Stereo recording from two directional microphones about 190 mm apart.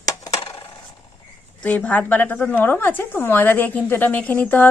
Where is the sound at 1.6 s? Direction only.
5° left (ahead or behind).